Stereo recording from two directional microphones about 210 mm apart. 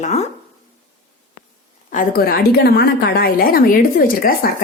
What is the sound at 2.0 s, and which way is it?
A woman's voice, 45° left (ahead or behind).